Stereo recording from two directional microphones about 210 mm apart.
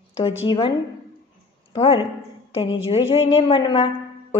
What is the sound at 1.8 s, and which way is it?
A woman's voice, 25° left (ahead or behind).